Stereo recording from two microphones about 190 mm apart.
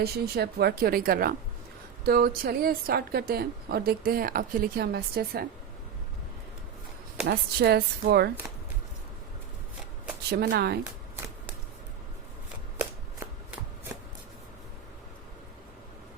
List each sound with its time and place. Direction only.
0.0 s a woman's voice: 60° right (ahead or behind)
7.3 s a woman's voice: 55° right (ahead or behind)
10.2 s a woman's voice: 60° right (ahead or behind)
12.8 s shuffling cards: 10° right (ahead or behind)